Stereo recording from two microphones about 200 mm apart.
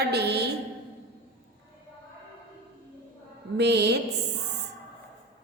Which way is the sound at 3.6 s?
55° right (ahead or behind).